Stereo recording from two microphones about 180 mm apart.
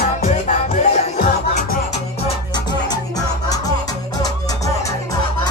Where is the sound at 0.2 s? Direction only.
40° left (ahead or behind).